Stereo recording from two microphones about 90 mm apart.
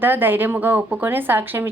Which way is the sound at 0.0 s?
20° right (ahead or behind).